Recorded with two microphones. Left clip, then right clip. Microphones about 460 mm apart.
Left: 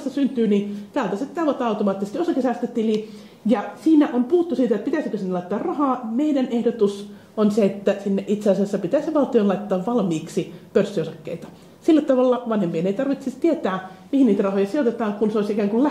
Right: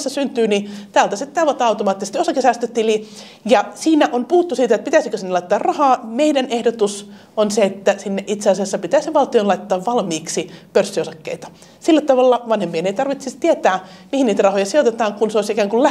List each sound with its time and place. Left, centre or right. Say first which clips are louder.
0.1 s a woman's voice: right 3 dB; right